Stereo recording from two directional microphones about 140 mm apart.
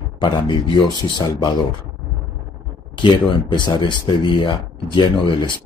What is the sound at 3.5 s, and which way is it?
Speech, 35° left (ahead or behind).